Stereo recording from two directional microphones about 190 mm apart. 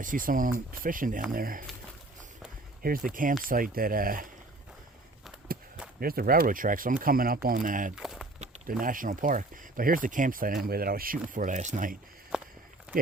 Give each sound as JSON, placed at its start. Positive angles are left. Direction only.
{"t": 0.0, "sound": "speech", "side_deg": -45}
{"t": 2.8, "sound": "speech", "side_deg": -50}
{"t": 6.0, "sound": "speech", "side_deg": -50}
{"t": 7.9, "sound": "a sound", "side_deg": 0}
{"t": 8.8, "sound": "speech", "side_deg": -45}
{"t": 12.3, "sound": "walk", "side_deg": -5}